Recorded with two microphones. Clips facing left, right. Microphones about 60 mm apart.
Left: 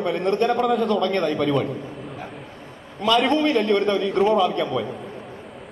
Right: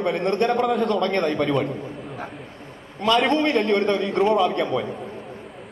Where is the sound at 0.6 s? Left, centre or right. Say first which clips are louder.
Left 1 dB; centre.